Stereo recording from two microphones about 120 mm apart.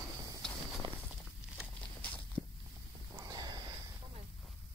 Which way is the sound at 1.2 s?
5° right (ahead or behind).